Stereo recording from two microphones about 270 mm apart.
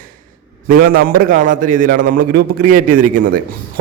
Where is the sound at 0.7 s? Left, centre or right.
Right.